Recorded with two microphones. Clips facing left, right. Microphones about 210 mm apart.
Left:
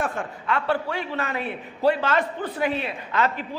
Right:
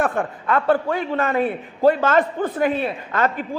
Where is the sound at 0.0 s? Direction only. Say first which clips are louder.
Right 6 dB; 50° right (ahead or behind).